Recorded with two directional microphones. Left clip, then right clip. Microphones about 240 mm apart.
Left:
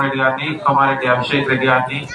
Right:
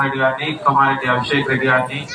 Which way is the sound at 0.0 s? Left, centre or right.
Left.